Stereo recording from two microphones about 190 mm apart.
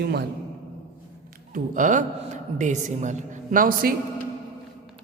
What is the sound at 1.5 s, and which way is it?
A man's voice, 45° right (ahead or behind).